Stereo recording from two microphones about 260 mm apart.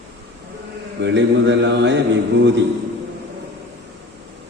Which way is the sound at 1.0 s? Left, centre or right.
Right.